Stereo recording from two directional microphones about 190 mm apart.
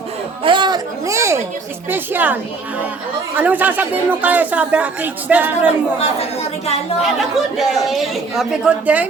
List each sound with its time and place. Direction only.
0.4 s a sound: 25° right (ahead or behind)
1.9 s speech: 10° right (ahead or behind)
7.0 s speech: centre (ahead or behind)